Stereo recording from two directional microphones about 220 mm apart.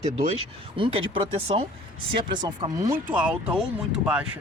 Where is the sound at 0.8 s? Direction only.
25° right (ahead or behind).